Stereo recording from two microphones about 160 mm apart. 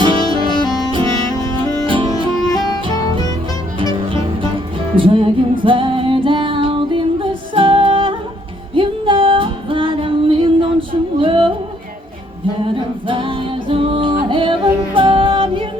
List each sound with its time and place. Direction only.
0.0 s music: 30° right (ahead or behind)
3.8 s music: 30° right (ahead or behind)
12.6 s music: 30° right (ahead or behind)